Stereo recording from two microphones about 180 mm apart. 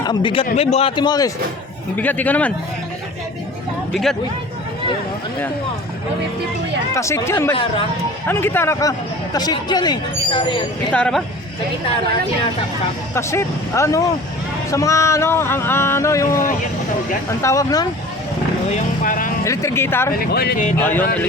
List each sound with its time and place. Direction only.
0.0 s a man's voice: 25° left (ahead or behind)
2.0 s speech: 10° left (ahead or behind)
6.9 s speech: 15° left (ahead or behind)
10.9 s speech: 5° left (ahead or behind)
13.1 s speech: 15° left (ahead or behind)
17.4 s speech: 20° left (ahead or behind)
18.7 s vehicle: 50° left (ahead or behind)
19.5 s speech: 15° left (ahead or behind)
20.1 s speech: 60° left (ahead or behind)
20.7 s speech: 10° left (ahead or behind)